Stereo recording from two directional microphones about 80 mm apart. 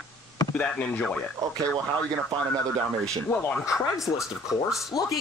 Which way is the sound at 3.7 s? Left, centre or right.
Left.